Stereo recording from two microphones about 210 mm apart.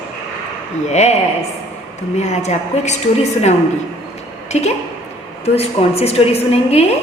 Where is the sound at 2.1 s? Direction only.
30° left (ahead or behind).